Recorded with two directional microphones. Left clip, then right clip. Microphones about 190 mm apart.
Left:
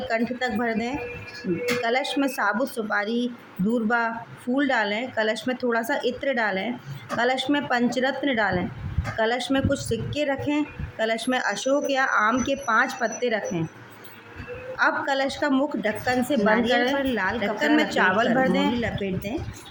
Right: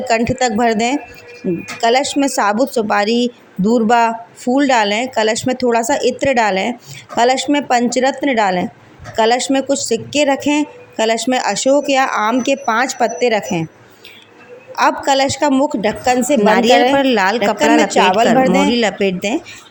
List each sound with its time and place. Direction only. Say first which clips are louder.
0.1 s a woman's voice: right 12 dB; 35° right (ahead or behind)
14.8 s a woman's voice: right 9 dB; 35° right (ahead or behind)
16.5 s speech: right 11 dB; 40° right (ahead or behind)
17.7 s a woman's voice: right 7 dB; 25° right (ahead or behind)
18.7 s speech: right 12 dB; 50° right (ahead or behind)